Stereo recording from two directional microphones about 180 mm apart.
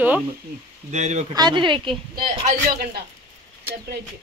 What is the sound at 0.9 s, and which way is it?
Speech, 40° right (ahead or behind).